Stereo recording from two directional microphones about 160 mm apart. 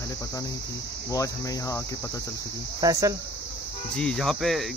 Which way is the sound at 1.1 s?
20° left (ahead or behind).